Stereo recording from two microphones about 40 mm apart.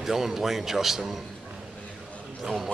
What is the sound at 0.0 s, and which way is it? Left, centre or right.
A man's voice, centre.